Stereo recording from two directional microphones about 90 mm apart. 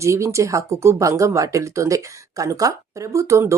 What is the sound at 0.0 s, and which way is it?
Speech, 30° right (ahead or behind).